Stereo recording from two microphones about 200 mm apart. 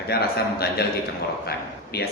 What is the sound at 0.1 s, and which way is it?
Speech, 50° left (ahead or behind).